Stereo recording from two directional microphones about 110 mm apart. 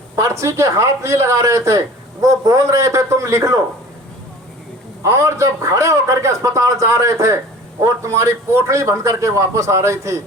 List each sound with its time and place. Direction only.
0.2 s a man's voice: 30° right (ahead or behind)
5.0 s a man's voice: 25° right (ahead or behind)